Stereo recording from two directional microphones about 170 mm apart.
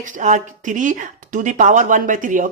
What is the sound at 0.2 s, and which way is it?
Speech, 45° right (ahead or behind).